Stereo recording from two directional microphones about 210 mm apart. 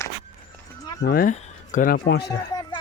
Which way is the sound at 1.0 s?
45° left (ahead or behind).